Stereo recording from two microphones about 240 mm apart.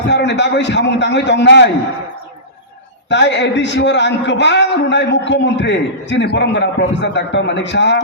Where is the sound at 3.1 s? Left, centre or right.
Left.